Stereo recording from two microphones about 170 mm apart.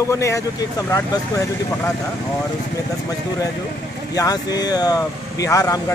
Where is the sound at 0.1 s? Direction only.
15° left (ahead or behind).